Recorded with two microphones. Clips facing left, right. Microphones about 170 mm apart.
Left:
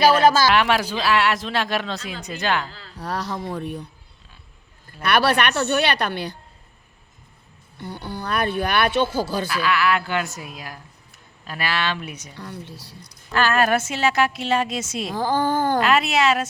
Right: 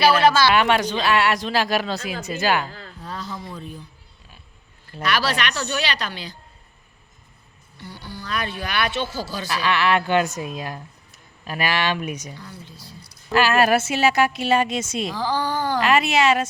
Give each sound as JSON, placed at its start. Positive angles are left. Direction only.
{"t": 0.0, "sound": "speech", "side_deg": 45}
{"t": 0.5, "sound": "a woman's voice", "side_deg": 0}
{"t": 2.6, "sound": "speech", "side_deg": -50}
{"t": 3.0, "sound": "speech", "side_deg": 75}
{"t": 5.0, "sound": "speech", "side_deg": 60}
{"t": 7.8, "sound": "speech", "side_deg": 55}
{"t": 9.5, "sound": "a woman's voice", "side_deg": -20}
{"t": 12.4, "sound": "speech", "side_deg": 65}
{"t": 13.3, "sound": "a woman's voice", "side_deg": -5}
{"t": 15.1, "sound": "speech", "side_deg": 50}
{"t": 15.8, "sound": "a woman's voice", "side_deg": 0}